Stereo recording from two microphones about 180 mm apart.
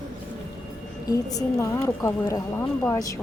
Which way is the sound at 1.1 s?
20° left (ahead or behind).